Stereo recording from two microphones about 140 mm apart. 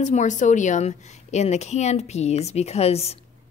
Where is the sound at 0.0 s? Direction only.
60° left (ahead or behind).